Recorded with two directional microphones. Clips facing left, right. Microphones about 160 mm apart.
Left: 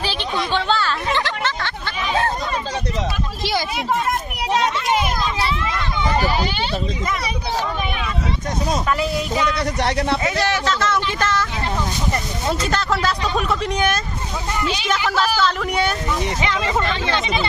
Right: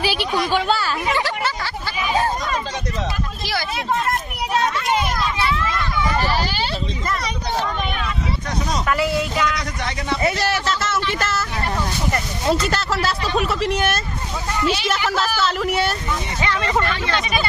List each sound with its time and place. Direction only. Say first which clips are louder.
0.0 s a sound: right 3 dB; 10° right (ahead or behind)
5.4 s a sound: right 1 dB; 20° left (ahead or behind)
6.4 s speech: left 2 dB; centre (ahead or behind)
8.8 s speech: right 1 dB; 20° left (ahead or behind)
9.8 s speech: left 7 dB; 70° left (ahead or behind)
10.2 s speech: even; 10° right (ahead or behind)
12.6 s speech: left 1 dB; 5° right (ahead or behind)
15.0 s speech: left 3 dB; 5° right (ahead or behind)
16.4 s speech: right 3 dB; 15° left (ahead or behind)